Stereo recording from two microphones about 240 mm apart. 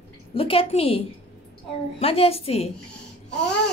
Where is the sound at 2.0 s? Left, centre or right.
Left.